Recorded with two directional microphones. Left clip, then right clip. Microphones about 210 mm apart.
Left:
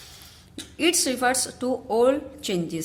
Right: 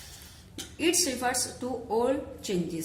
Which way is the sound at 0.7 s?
50° left (ahead or behind).